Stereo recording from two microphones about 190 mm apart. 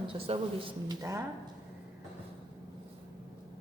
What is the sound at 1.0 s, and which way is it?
Speech, 15° right (ahead or behind).